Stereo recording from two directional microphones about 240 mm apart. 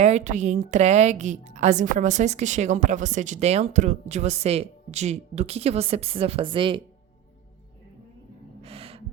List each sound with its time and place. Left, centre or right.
0.0 s a woman's voice: right
8.6 s gasp: right